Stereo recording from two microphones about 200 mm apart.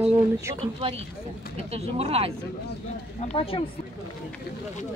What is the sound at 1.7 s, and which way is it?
Speech, 30° right (ahead or behind).